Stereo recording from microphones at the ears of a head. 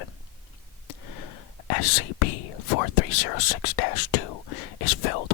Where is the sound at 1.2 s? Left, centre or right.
Left.